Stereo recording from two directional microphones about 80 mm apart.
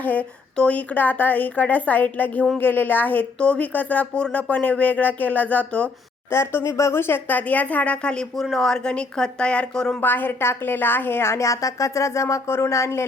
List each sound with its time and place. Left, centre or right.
0.0 s a woman's voice: centre
6.3 s a woman's voice: left; by 10.0 s centre
10.0 s a woman's voice: left